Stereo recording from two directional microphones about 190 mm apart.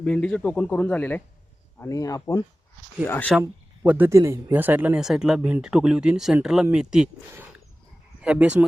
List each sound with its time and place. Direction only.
0.0 s speech: 5° left (ahead or behind)
3.4 s speech: 10° right (ahead or behind)